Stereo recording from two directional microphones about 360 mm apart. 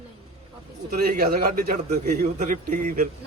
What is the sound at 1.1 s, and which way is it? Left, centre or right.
A man's voice, right.